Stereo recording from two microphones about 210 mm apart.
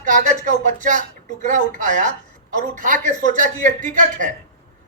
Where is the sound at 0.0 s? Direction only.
40° right (ahead or behind).